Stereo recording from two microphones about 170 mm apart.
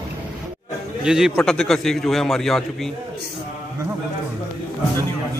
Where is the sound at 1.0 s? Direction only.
5° right (ahead or behind).